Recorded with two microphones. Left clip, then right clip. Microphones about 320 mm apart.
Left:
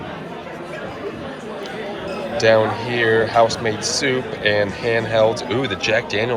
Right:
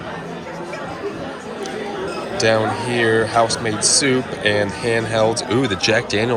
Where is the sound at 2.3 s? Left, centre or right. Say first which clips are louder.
Left 2 dB; centre.